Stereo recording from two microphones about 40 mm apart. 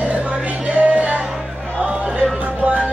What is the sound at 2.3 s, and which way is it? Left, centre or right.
Music, right.